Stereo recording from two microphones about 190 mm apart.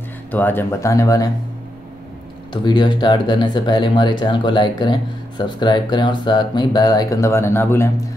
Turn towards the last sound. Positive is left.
turn(degrees=10)  # may be behind; listen again after turning